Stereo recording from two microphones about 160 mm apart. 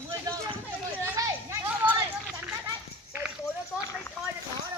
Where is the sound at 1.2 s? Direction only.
20° right (ahead or behind).